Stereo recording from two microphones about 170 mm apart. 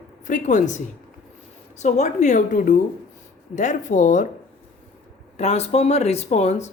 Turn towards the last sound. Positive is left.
turn(degrees=40)  # may be behind; listen again after turning